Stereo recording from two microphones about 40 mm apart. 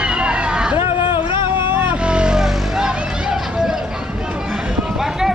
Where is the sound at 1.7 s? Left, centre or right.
Right.